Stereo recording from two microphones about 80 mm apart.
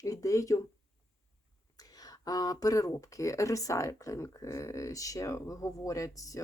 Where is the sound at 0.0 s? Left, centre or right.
Left.